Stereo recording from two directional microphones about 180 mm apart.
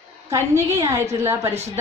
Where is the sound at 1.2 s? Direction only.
15° right (ahead or behind).